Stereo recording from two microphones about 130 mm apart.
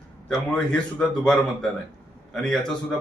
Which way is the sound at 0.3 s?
5° left (ahead or behind).